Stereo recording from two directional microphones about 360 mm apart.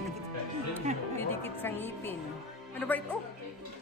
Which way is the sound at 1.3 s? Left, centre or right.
Centre.